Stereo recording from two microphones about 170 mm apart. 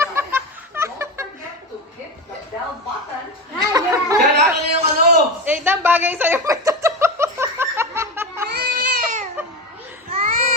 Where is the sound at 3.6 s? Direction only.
20° right (ahead or behind).